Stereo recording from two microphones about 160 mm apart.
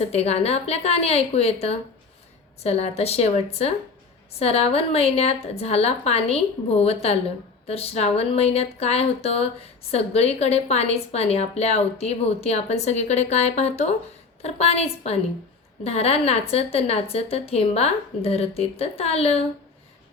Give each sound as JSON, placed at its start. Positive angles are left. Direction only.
{"t": 0.0, "sound": "a woman's voice", "side_deg": 40}